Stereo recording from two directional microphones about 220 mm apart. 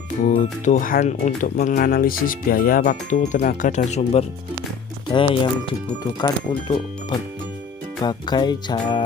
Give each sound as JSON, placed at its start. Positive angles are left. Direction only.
{"t": 0.3, "sound": "speech", "side_deg": 35}